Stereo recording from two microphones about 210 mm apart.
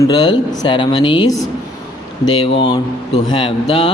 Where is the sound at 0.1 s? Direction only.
20° left (ahead or behind).